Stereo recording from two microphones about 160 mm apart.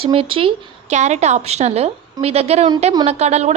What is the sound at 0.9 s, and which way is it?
A woman's voice, 45° right (ahead or behind).